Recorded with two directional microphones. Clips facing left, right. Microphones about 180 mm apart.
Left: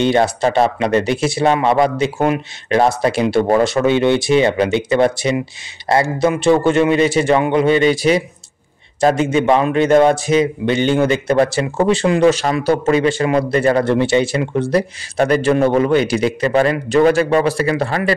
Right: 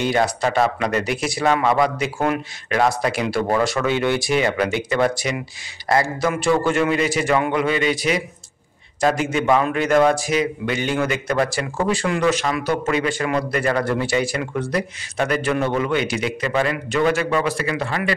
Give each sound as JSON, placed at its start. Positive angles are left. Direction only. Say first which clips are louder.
{"t": 0.0, "sound": "a man's voice", "louder": "left 5 dB", "side_deg": 25}